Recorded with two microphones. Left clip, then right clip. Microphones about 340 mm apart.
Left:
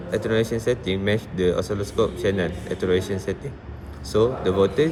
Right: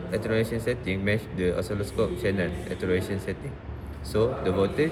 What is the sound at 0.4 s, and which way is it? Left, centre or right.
Speech, left.